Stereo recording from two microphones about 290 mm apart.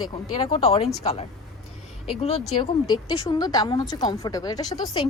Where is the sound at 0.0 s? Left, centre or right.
Centre.